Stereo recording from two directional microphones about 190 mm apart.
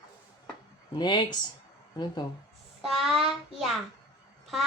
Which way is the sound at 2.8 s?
Centre (ahead or behind).